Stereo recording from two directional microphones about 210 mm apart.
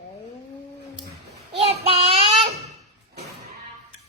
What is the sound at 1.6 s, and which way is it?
Child singing, 30° right (ahead or behind).